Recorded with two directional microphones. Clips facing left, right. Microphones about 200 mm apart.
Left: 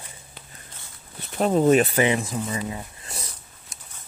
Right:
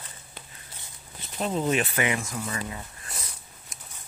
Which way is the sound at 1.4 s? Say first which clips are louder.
Left 8 dB; 50° left (ahead or behind).